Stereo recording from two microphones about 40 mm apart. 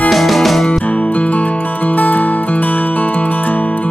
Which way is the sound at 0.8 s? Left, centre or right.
Left.